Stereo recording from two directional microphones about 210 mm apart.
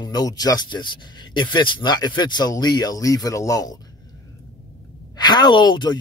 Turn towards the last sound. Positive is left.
turn(degrees=20)  # may be behind; listen again after turning